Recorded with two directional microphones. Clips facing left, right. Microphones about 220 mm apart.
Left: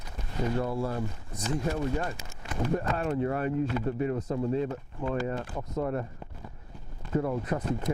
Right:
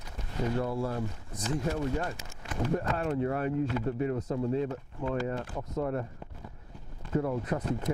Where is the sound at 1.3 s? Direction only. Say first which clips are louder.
Left 1 dB; 10° left (ahead or behind).